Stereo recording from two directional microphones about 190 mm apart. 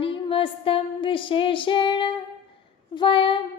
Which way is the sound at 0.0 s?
30° left (ahead or behind).